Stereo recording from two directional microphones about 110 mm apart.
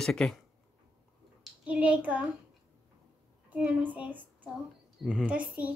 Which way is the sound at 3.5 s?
15° right (ahead or behind).